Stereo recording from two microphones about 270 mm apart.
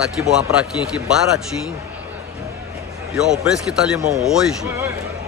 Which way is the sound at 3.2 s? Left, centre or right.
Centre.